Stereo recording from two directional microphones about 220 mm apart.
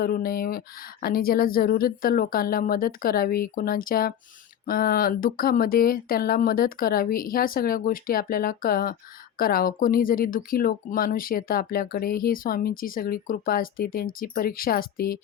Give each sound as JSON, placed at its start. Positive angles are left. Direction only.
{"t": 0.0, "sound": "speech", "side_deg": 40}